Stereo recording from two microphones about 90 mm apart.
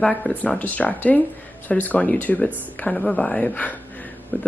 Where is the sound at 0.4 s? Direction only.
20° left (ahead or behind).